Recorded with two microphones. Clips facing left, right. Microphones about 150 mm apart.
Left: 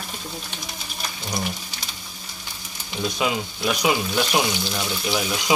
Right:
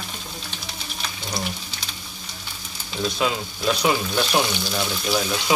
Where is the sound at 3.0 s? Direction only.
15° left (ahead or behind).